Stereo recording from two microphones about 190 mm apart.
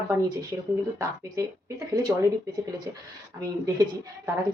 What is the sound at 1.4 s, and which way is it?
Speech, 15° right (ahead or behind).